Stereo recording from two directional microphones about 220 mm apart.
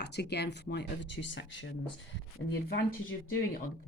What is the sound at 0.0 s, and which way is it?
A woman's voice, 50° left (ahead or behind).